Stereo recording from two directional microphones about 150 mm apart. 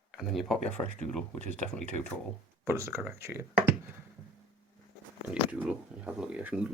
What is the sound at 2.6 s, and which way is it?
Speech, 15° right (ahead or behind).